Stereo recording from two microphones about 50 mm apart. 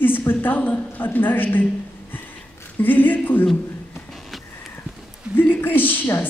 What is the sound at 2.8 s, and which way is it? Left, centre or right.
Speech, left.